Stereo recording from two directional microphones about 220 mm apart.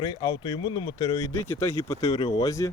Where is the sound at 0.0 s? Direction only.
20° left (ahead or behind).